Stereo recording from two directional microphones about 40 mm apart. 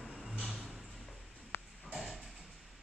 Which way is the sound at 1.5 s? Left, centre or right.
Left.